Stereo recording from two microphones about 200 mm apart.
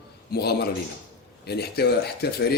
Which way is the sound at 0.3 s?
50° left (ahead or behind).